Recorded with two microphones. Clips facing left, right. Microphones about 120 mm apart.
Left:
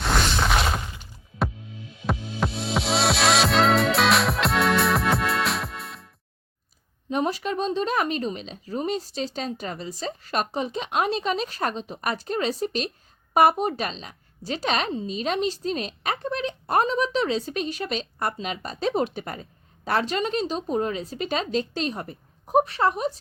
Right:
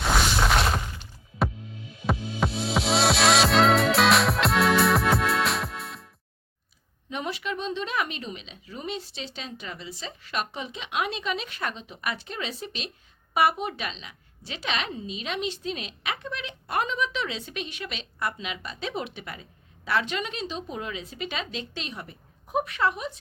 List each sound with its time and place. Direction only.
0.0 s music: centre (ahead or behind)
7.1 s a woman's voice: 40° left (ahead or behind)